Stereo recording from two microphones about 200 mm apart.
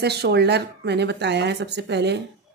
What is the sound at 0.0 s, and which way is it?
A woman's voice, 55° right (ahead or behind).